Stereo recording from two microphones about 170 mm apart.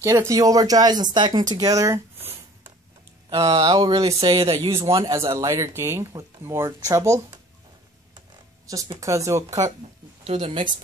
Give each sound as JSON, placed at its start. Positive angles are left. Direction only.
{"t": 0.0, "sound": "speech", "side_deg": -20}
{"t": 1.5, "sound": "a sound", "side_deg": -20}
{"t": 3.3, "sound": "speech", "side_deg": -25}
{"t": 5.3, "sound": "speech", "side_deg": -20}
{"t": 8.6, "sound": "speech", "side_deg": -20}
{"t": 10.2, "sound": "speech", "side_deg": -35}